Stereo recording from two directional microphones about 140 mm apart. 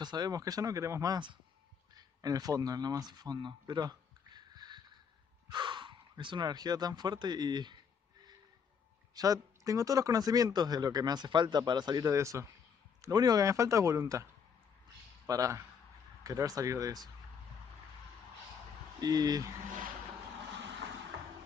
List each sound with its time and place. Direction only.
0.0 s a man's voice: 30° right (ahead or behind)
2.0 s a sound: 25° right (ahead or behind)
5.5 s speech: 35° right (ahead or behind)
9.1 s a man's voice: 25° right (ahead or behind)
15.2 s a man's voice: 25° right (ahead or behind)
18.9 s a man's voice: 25° right (ahead or behind)